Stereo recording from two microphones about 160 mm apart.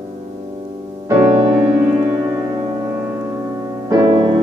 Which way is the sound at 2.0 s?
15° right (ahead or behind).